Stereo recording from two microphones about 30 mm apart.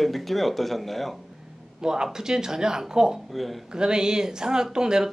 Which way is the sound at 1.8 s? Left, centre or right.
Right.